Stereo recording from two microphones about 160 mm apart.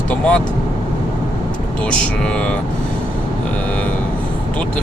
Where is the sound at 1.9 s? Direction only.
5° left (ahead or behind).